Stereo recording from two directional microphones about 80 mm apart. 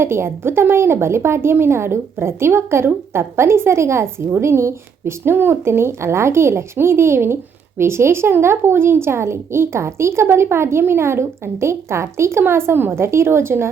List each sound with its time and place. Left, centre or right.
0.0 s a woman's voice: right